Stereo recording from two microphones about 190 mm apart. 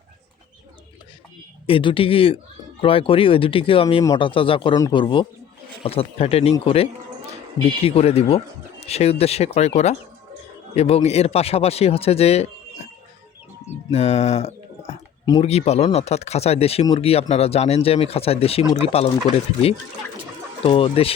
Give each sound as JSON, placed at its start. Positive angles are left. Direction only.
{"t": 1.6, "sound": "speech", "side_deg": 25}
{"t": 13.9, "sound": "speech", "side_deg": 35}
{"t": 20.7, "sound": "speech", "side_deg": 30}